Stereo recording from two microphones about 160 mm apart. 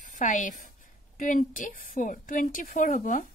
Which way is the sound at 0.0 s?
55° left (ahead or behind).